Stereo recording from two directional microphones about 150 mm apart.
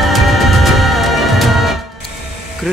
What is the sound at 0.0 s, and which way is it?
Music, centre (ahead or behind).